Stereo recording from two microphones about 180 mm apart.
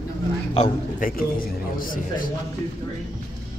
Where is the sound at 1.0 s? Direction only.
50° left (ahead or behind).